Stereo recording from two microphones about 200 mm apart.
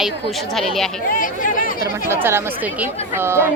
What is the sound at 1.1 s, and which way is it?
Speech, 40° left (ahead or behind).